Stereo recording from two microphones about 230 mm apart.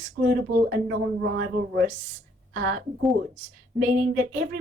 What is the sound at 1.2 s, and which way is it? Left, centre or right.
Speech, right.